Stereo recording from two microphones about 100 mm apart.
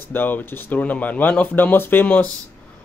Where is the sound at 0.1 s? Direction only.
20° left (ahead or behind).